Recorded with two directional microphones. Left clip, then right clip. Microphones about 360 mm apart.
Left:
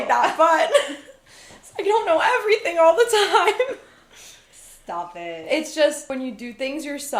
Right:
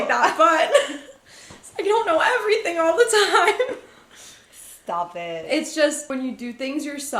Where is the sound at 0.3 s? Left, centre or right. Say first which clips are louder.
Right 1 dB; left.